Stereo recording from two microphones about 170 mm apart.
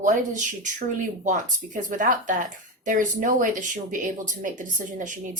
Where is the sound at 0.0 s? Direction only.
45° right (ahead or behind).